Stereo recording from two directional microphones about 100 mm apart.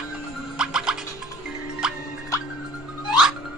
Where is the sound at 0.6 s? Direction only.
10° right (ahead or behind).